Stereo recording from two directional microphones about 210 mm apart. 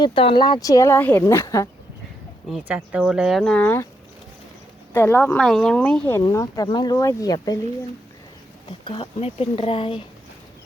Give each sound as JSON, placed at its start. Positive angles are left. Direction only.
{"t": 0.0, "sound": "speech", "side_deg": 25}
{"t": 2.5, "sound": "speech", "side_deg": -5}
{"t": 4.9, "sound": "speech", "side_deg": 10}
{"t": 8.8, "sound": "speech", "side_deg": 25}